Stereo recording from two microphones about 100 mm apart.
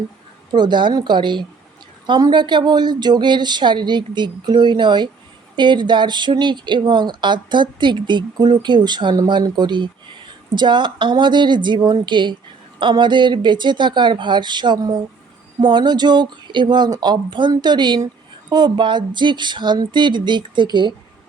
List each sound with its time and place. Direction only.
0.5 s speech: 50° right (ahead or behind)